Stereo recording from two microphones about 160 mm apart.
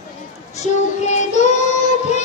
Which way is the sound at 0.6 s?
45° left (ahead or behind).